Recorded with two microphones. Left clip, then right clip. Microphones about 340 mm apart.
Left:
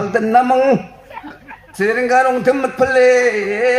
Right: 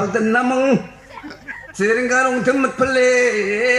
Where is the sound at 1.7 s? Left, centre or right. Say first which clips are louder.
Left 3 dB; centre.